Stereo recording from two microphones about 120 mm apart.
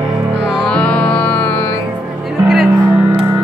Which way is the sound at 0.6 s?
10° left (ahead or behind).